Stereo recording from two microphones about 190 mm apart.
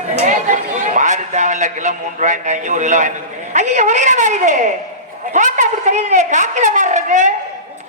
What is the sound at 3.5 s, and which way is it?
A man's voice, 40° right (ahead or behind).